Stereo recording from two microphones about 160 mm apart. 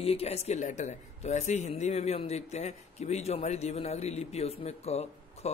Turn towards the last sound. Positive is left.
turn(degrees=40)  # may be behind; listen again after turning